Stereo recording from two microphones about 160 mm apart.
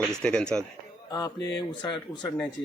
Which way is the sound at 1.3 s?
90° left.